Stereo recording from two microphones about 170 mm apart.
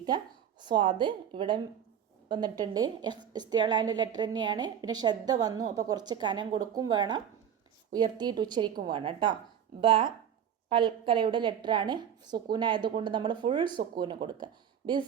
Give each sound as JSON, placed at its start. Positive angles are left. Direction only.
{"t": 0.6, "sound": "a woman's voice", "side_deg": -30}